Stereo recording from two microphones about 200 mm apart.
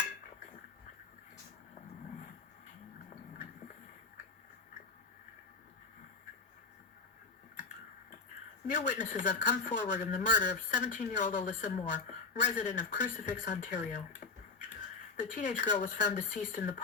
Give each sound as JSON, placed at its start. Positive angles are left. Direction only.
{"t": 8.7, "sound": "a woman's voice", "side_deg": 40}
{"t": 15.1, "sound": "a woman's voice", "side_deg": 40}